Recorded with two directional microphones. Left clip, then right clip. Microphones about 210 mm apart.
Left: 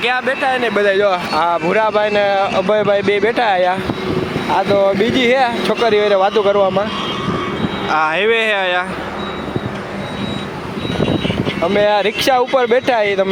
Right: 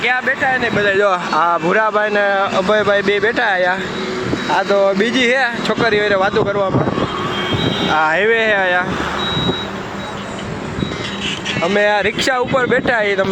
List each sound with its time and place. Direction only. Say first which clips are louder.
0.0 s speech: even; 25° left (ahead or behind)
1.3 s speech: right 1 dB; 5° right (ahead or behind); by 6.7 s 15° left (ahead or behind)
7.9 s speech: even; centre (ahead or behind)
11.8 s speech: left 1 dB; centre (ahead or behind)